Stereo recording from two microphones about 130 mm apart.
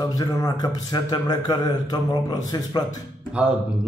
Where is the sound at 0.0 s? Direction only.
25° left (ahead or behind).